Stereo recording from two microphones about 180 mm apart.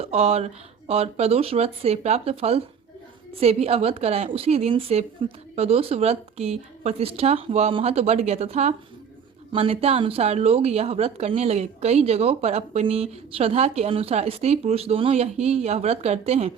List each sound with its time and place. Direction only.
0.0 s speech: 35° right (ahead or behind)